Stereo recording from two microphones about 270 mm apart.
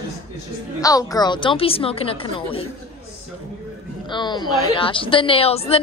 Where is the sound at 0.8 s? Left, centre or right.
Centre.